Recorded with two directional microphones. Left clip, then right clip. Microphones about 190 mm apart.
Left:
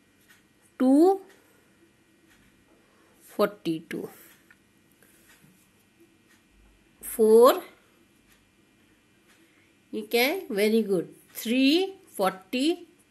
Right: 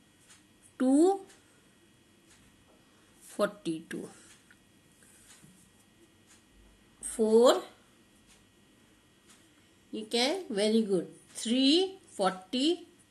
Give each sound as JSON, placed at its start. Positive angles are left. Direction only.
{"t": 0.7, "sound": "a sound", "side_deg": 40}
{"t": 3.3, "sound": "speech", "side_deg": 40}
{"t": 7.0, "sound": "a woman's voice", "side_deg": 50}
{"t": 9.8, "sound": "speech", "side_deg": 50}